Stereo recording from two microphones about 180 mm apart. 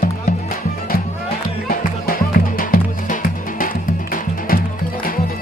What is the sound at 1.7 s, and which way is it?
Music, 50° left (ahead or behind).